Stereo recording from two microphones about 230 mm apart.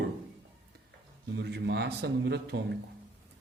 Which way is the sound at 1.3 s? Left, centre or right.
Right.